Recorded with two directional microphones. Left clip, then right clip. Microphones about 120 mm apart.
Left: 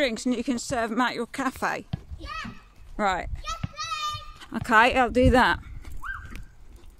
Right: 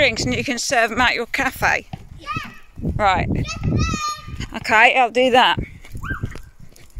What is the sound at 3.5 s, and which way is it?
Children playing, 20° right (ahead or behind).